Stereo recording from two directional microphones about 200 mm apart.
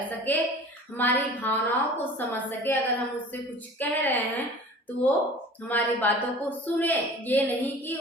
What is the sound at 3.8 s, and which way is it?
Speech, 10° left (ahead or behind).